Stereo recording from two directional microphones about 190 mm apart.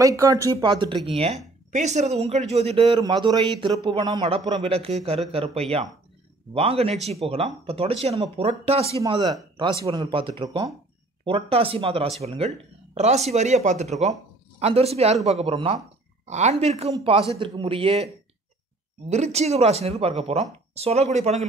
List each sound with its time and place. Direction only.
0.0 s speech: 15° right (ahead or behind)
9.0 s speech: 20° right (ahead or behind); by 21.5 s 35° right (ahead or behind)